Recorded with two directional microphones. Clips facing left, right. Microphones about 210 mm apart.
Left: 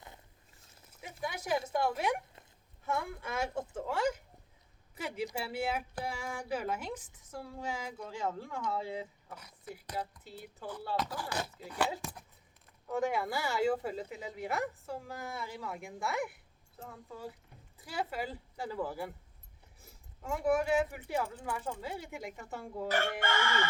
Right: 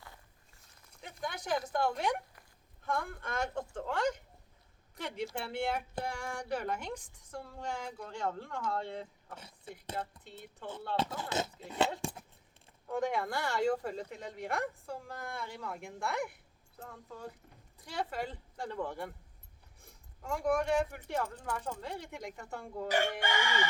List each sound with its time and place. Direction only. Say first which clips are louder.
0.9 s a woman's voice: left 1 dB; 5° left (ahead or behind)
10.9 s speech: right 2 dB; 25° right (ahead or behind)
12.0 s a sound: right 5 dB; 25° right (ahead or behind)
12.9 s speech: left 1 dB; 5° left (ahead or behind)
23.2 s chicken: left 1 dB; 15° right (ahead or behind)